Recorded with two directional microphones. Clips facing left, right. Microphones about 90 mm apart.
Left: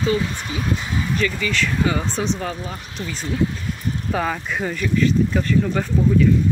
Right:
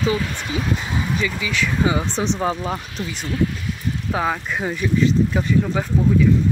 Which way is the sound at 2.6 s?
40° right (ahead or behind).